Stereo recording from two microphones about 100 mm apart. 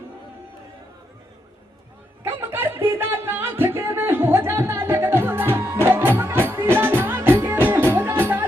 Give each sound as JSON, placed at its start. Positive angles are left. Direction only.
{"t": 2.2, "sound": "music", "side_deg": -20}